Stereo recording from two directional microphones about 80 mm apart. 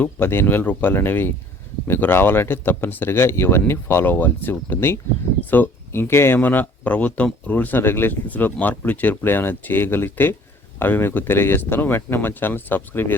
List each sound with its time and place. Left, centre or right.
0.0 s speech: left